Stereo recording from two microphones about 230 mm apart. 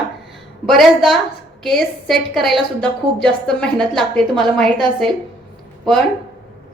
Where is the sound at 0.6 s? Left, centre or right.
Centre.